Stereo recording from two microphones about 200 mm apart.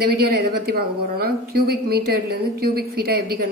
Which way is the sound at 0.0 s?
50° right (ahead or behind).